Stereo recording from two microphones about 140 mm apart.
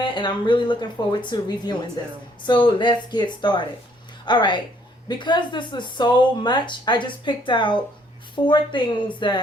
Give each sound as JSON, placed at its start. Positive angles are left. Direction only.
{"t": 0.0, "sound": "speech", "side_deg": 30}